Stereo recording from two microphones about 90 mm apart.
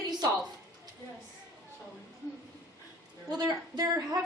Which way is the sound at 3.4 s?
45° right (ahead or behind).